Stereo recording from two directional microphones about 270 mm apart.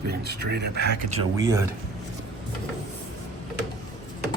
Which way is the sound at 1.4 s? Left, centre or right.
Centre.